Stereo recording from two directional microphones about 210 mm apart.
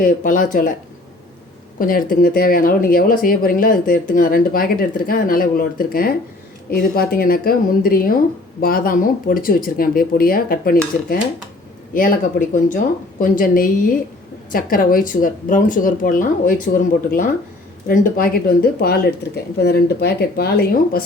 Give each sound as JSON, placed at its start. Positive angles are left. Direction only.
{"t": 0.0, "sound": "speech", "side_deg": 40}
{"t": 1.8, "sound": "speech", "side_deg": 45}
{"t": 11.9, "sound": "speech", "side_deg": 40}